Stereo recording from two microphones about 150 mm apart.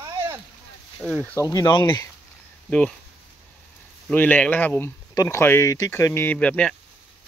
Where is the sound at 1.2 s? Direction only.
20° left (ahead or behind).